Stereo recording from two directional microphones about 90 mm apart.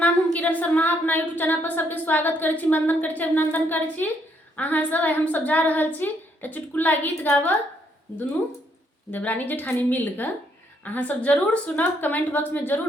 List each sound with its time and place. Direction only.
0.0 s a woman's voice: 15° left (ahead or behind)
9.1 s a woman's voice: 20° left (ahead or behind)